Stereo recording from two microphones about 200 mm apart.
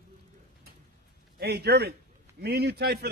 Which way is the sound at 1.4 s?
55° right (ahead or behind).